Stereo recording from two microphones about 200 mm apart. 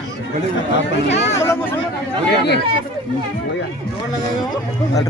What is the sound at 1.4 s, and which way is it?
Speech, 10° left (ahead or behind).